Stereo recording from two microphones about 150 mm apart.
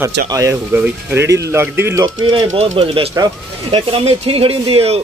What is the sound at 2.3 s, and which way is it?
Speech, 40° right (ahead or behind).